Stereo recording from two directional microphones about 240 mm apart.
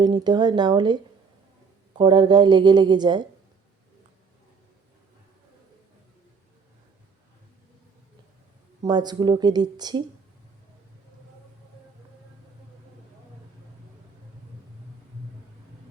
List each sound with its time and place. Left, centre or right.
0.0 s speech: centre
2.0 s a woman's voice: centre
8.8 s speech: centre